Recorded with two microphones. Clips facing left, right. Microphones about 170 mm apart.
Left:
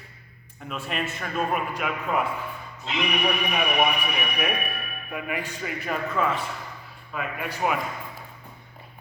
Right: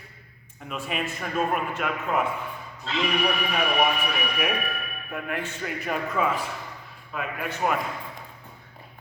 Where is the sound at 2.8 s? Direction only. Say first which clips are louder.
Right 1 dB; 20° left (ahead or behind).